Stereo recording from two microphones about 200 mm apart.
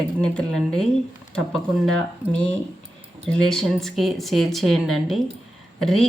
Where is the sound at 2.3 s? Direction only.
5° left (ahead or behind).